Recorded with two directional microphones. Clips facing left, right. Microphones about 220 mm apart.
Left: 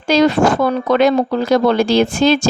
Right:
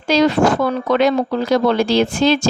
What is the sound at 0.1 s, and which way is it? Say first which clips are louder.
Speech: left 1 dB; 50° left (ahead or behind).